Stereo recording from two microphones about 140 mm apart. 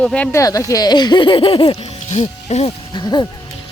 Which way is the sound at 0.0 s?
10° left (ahead or behind).